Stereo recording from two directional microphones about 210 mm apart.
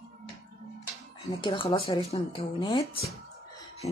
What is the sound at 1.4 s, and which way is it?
Speech, 25° left (ahead or behind).